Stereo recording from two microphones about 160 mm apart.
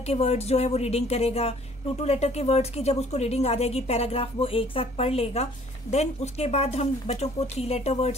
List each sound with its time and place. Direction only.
0.0 s a woman's voice: 40° left (ahead or behind)